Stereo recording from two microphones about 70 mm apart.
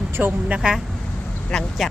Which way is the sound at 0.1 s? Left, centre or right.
Right.